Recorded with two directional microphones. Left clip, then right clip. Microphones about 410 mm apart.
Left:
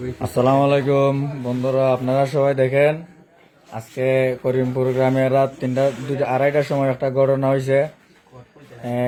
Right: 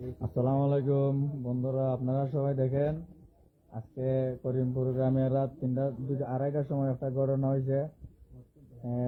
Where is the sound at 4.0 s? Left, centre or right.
Centre.